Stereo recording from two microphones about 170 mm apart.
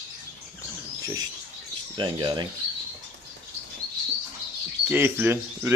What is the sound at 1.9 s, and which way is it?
Speech, 25° right (ahead or behind).